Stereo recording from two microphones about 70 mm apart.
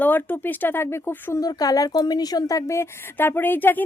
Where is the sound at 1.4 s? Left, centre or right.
Left.